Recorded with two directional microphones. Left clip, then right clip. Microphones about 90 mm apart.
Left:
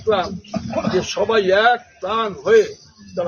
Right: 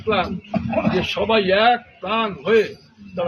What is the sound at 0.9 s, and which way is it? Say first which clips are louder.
A man's voice: left 3 dB; 30° left (ahead or behind).